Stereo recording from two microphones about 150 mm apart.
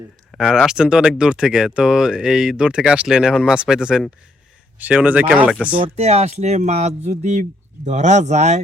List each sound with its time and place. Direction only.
0.3 s speech: centre (ahead or behind)
5.7 s speech: 40° right (ahead or behind)